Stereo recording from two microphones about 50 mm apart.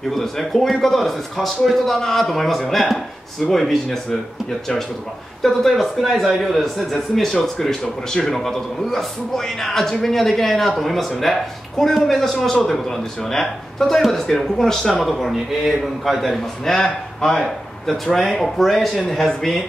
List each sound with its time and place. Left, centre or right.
0.1 s speech: centre